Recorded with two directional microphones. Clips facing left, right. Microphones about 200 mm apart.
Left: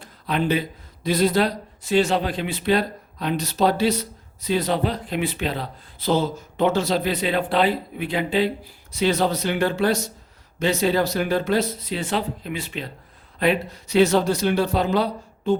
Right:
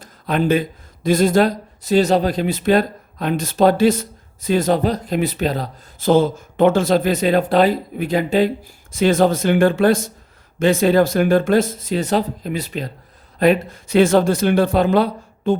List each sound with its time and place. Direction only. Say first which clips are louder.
0.0 s speech: right 4 dB; 45° right (ahead or behind)